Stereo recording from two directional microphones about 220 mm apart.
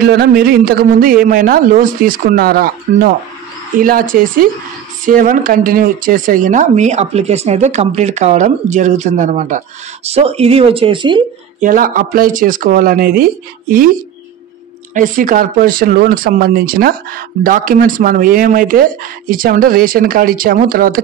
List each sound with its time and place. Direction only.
0.0 s speech: 45° right (ahead or behind); by 11.2 s 20° right (ahead or behind)
11.6 s speech: 40° right (ahead or behind)
15.0 s speech: 40° right (ahead or behind)